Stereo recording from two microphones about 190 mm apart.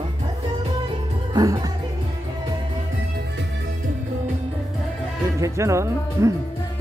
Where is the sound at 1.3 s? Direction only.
20° right (ahead or behind).